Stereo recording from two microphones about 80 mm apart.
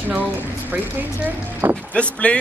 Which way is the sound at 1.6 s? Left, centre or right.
Right.